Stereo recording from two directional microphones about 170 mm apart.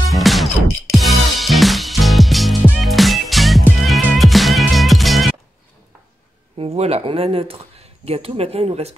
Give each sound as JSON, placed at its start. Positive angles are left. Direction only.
{"t": 0.1, "sound": "music", "side_deg": 0}
{"t": 6.6, "sound": "speech", "side_deg": -35}